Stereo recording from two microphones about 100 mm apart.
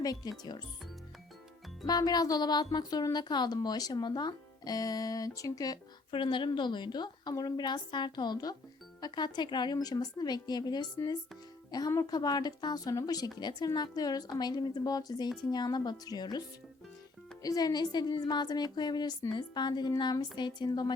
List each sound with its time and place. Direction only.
0.0 s a woman's voice: 40° left (ahead or behind)
1.9 s a woman's voice: 40° left (ahead or behind)
6.1 s a woman's voice: 55° left (ahead or behind)
17.4 s a woman's voice: 40° left (ahead or behind)